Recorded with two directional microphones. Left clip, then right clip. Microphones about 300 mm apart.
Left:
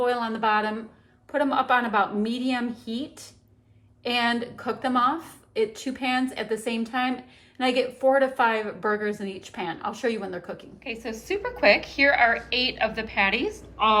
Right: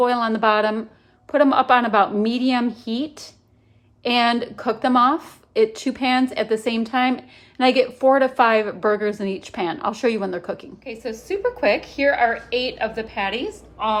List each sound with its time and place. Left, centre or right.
0.0 s speech: centre
10.8 s a woman's voice: centre